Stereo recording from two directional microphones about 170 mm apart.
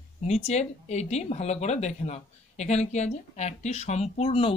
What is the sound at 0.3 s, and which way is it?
Speech, 40° left (ahead or behind).